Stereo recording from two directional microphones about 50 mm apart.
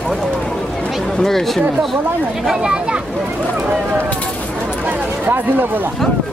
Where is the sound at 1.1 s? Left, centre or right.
Centre.